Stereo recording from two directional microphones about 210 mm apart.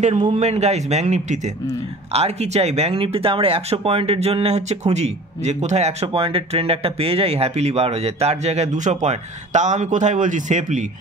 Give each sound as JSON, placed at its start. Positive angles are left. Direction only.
{"t": 0.0, "sound": "speech", "side_deg": -30}